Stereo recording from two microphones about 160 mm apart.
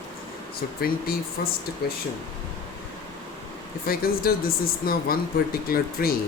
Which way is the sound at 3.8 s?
70° left (ahead or behind).